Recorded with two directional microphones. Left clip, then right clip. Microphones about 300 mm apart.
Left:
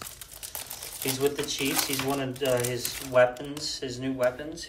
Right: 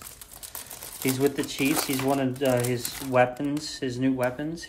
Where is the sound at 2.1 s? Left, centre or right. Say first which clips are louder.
Right 1 dB; centre.